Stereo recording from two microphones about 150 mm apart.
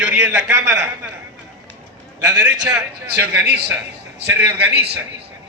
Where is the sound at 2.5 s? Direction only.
25° right (ahead or behind).